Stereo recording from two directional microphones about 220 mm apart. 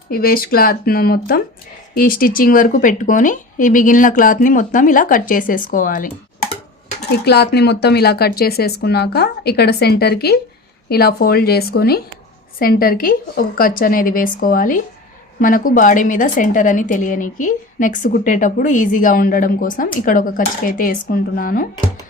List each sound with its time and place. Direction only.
0.1 s a woman's voice: 40° left (ahead or behind)
7.1 s a woman's voice: 50° left (ahead or behind)